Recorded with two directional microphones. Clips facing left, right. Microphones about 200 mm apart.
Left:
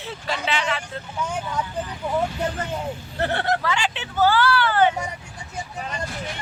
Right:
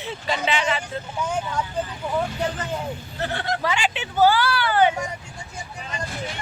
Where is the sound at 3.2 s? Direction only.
60° left (ahead or behind).